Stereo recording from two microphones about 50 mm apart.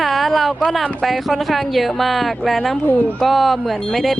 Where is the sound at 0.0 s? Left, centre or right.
Centre.